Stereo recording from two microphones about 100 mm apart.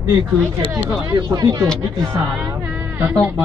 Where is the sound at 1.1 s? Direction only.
45° right (ahead or behind).